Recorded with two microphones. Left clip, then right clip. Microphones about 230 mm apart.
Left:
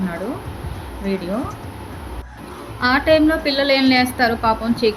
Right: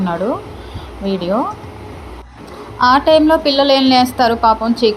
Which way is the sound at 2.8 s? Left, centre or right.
Centre.